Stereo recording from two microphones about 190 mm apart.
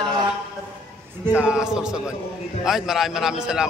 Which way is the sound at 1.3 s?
5° right (ahead or behind).